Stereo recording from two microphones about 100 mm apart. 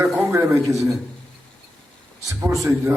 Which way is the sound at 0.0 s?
25° right (ahead or behind).